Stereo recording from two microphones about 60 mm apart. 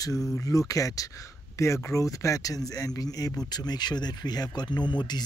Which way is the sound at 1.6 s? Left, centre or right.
Left.